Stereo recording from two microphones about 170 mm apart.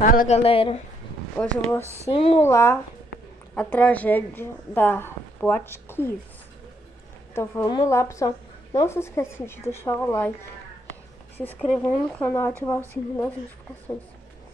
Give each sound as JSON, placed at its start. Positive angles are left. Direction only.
{"t": 0.0, "sound": "speech", "side_deg": 55}
{"t": 0.3, "sound": "speech", "side_deg": 35}
{"t": 1.4, "sound": "a woman's voice", "side_deg": 5}
{"t": 2.0, "sound": "speech", "side_deg": 30}
{"t": 2.4, "sound": "a woman's voice", "side_deg": 15}
{"t": 7.3, "sound": "a woman's voice", "side_deg": 15}
{"t": 11.3, "sound": "a woman's voice", "side_deg": 10}